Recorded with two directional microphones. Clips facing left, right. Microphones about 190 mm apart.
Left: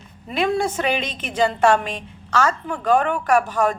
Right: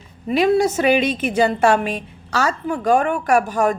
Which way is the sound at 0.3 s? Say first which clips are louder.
Right 5 dB; 5° right (ahead or behind).